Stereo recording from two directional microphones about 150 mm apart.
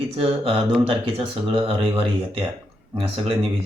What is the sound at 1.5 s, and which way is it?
Speech, 40° right (ahead or behind).